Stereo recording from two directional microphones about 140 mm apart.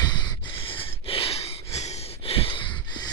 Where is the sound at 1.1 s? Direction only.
40° left (ahead or behind).